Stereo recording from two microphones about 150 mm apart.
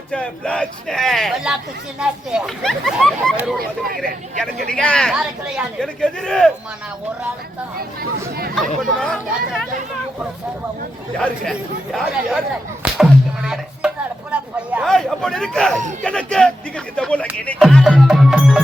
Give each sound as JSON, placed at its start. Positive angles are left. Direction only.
{"t": 0.1, "sound": "speech", "side_deg": 10}
{"t": 3.6, "sound": "speech", "side_deg": -80}
{"t": 4.0, "sound": "speech", "side_deg": 5}
{"t": 8.5, "sound": "speech", "side_deg": 0}
{"t": 11.2, "sound": "speech", "side_deg": 0}
{"t": 12.8, "sound": "a sound", "side_deg": -5}
{"t": 14.8, "sound": "speech", "side_deg": 0}
{"t": 17.6, "sound": "music", "side_deg": 0}